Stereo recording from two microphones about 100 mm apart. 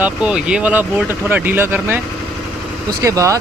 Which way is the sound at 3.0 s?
30° right (ahead or behind).